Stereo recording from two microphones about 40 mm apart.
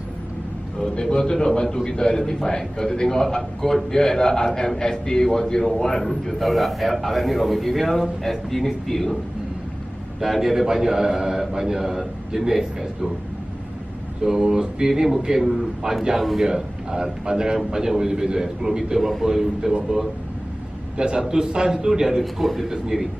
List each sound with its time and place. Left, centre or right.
1.1 s a man's voice: left
10.2 s a man's voice: centre
14.2 s a man's voice: centre
21.0 s a man's voice: centre
22.2 s a man's voice: centre